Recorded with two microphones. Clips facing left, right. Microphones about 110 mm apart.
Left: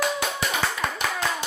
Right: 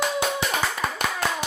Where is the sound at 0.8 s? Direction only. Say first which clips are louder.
Even; centre (ahead or behind).